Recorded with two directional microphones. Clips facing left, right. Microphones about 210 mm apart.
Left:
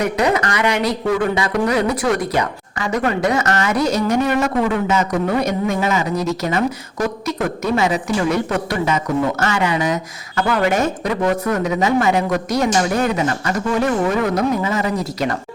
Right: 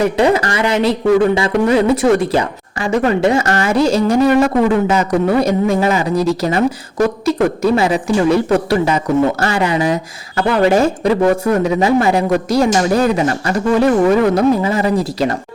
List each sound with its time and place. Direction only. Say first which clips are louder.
0.0 s speech: right 4 dB; 30° right (ahead or behind)